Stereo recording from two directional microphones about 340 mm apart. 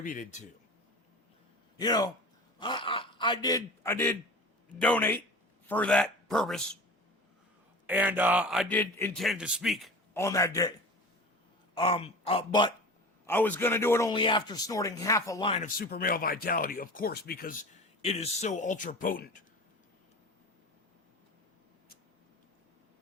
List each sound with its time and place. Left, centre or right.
0.0 s a man's voice: left
1.8 s a man's voice: centre
7.9 s speech: centre
11.7 s a man's voice: centre